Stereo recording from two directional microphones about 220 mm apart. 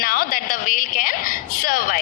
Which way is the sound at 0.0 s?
40° left (ahead or behind).